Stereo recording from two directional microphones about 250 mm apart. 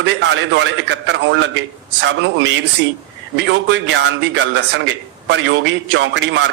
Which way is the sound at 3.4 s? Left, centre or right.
Right.